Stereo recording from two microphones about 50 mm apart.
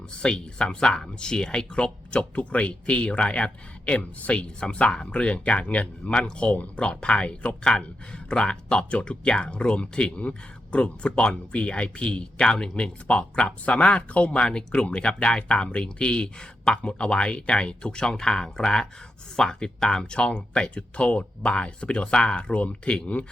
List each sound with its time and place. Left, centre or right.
0.1 s speech: centre